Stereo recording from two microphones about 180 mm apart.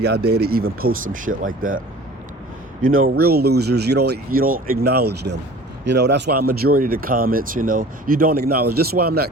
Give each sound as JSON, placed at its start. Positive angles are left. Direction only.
{"t": 0.0, "sound": "speech", "side_deg": -65}
{"t": 2.8, "sound": "speech", "side_deg": -55}